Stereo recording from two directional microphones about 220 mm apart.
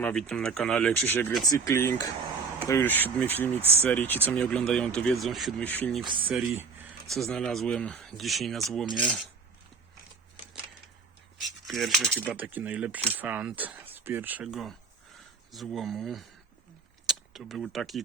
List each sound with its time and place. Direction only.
0.0 s speech: 5° left (ahead or behind)
6.1 s speech: 25° right (ahead or behind)
6.3 s speech: 10° right (ahead or behind)
7.1 s speech: centre (ahead or behind)
11.6 s speech: centre (ahead or behind)